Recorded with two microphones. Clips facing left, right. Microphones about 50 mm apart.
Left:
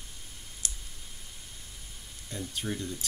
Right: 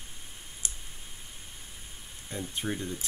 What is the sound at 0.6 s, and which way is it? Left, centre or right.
Clicking, right.